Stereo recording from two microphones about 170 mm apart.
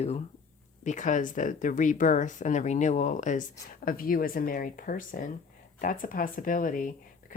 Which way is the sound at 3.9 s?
55° left (ahead or behind).